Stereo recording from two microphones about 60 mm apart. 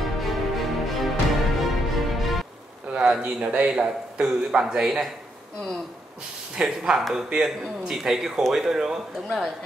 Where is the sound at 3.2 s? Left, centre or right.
Right.